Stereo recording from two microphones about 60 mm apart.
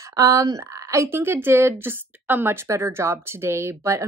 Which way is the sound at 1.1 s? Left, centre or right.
Right.